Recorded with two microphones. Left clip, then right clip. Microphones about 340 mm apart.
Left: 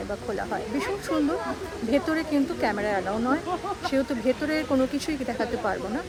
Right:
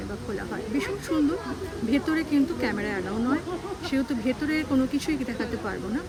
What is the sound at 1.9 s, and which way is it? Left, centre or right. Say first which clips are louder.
Speech: left 1 dB; centre.